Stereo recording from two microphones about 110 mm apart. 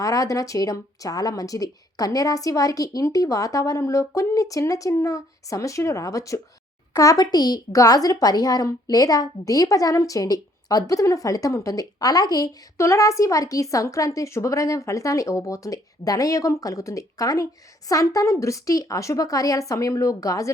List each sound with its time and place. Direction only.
0.0 s a woman's voice: 30° left (ahead or behind)